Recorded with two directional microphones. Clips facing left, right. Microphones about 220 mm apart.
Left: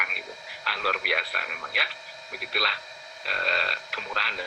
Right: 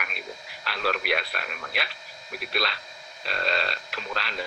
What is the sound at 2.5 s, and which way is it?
Speech, 25° right (ahead or behind).